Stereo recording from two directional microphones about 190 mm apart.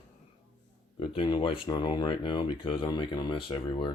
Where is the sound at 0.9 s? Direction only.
25° left (ahead or behind).